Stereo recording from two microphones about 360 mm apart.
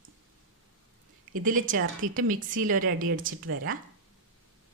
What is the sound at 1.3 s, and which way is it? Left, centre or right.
Speech, right.